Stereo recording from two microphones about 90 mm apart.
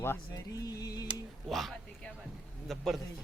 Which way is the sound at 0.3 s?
40° left (ahead or behind).